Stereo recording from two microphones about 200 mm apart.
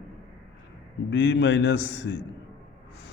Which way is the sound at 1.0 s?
60° left (ahead or behind).